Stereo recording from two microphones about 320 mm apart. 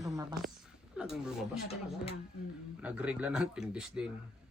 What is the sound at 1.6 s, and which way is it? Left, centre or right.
Speech, centre.